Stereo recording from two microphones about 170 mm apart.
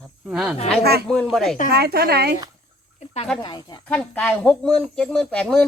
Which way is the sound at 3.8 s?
10° left (ahead or behind).